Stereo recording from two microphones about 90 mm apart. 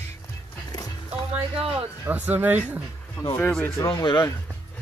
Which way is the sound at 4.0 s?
50° left (ahead or behind).